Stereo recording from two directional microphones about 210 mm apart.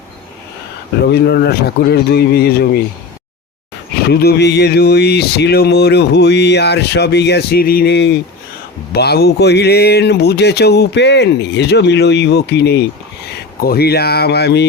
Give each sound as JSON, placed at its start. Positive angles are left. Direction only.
{"t": 1.1, "sound": "speech", "side_deg": 50}
{"t": 4.0, "sound": "speech", "side_deg": 50}